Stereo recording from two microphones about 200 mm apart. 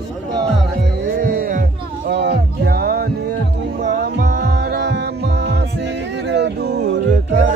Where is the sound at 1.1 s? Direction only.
45° right (ahead or behind).